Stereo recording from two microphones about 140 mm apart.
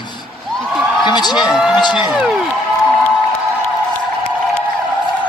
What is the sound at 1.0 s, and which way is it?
Speech, 30° left (ahead or behind).